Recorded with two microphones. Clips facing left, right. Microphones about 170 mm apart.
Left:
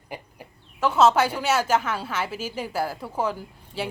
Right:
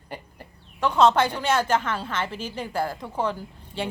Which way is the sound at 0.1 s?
5° left (ahead or behind).